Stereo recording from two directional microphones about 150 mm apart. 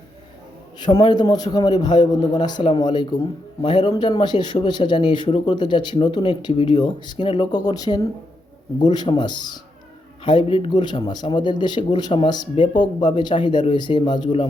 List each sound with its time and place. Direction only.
0.8 s a man's voice: 30° left (ahead or behind)